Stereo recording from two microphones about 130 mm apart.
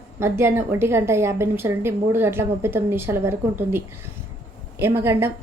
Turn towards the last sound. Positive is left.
turn(degrees=-20)  # may be behind; listen again after turning